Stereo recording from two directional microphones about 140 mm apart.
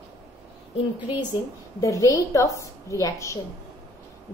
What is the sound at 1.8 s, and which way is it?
A woman's voice, 20° left (ahead or behind).